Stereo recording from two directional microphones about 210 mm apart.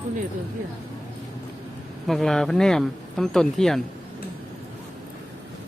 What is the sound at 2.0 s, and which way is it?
Speech, centre (ahead or behind).